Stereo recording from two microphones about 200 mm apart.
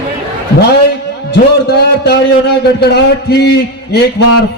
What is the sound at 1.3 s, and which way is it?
A man's voice, 55° left (ahead or behind).